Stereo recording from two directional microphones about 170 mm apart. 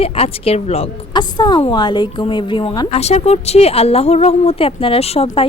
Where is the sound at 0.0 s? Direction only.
35° left (ahead or behind).